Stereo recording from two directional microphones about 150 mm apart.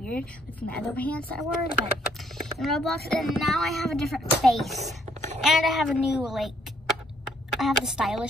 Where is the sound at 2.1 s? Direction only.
Centre (ahead or behind).